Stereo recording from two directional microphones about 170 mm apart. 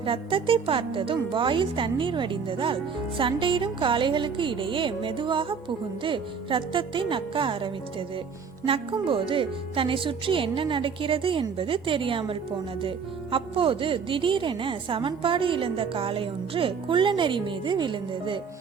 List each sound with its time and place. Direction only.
0.0 s a woman's voice: 30° right (ahead or behind)